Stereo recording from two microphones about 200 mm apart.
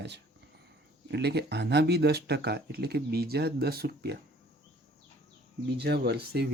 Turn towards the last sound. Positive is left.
turn(degrees=-55)  # may be behind; listen again after turning